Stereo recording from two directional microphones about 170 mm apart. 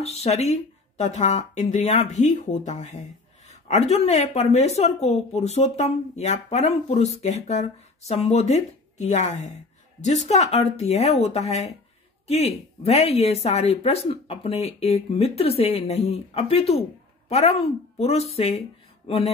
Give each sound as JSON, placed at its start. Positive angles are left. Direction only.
{"t": 0.0, "sound": "speech", "side_deg": 40}